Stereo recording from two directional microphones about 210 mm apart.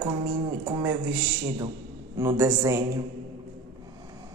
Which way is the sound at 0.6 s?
15° right (ahead or behind).